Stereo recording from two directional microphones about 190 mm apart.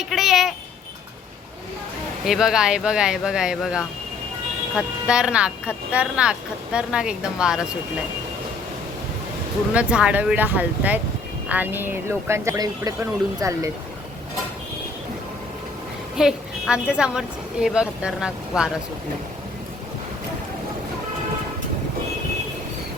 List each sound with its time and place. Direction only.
0.0 s a sound: centre (ahead or behind)
2.2 s a woman's voice: centre (ahead or behind)
9.7 s speech: 5° right (ahead or behind)
16.1 s a woman's voice: 5° right (ahead or behind)